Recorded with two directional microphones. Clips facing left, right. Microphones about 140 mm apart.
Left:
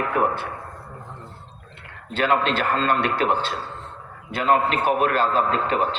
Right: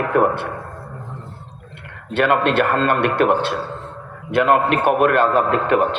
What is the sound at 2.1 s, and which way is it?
A man's voice, 60° right (ahead or behind).